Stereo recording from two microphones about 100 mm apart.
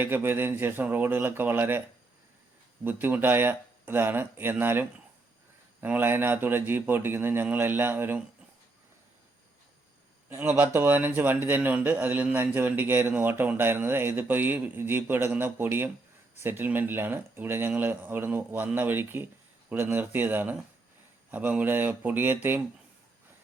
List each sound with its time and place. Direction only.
0.0 s speech: 20° right (ahead or behind)
2.8 s speech: 20° right (ahead or behind)
10.2 s speech: 20° right (ahead or behind)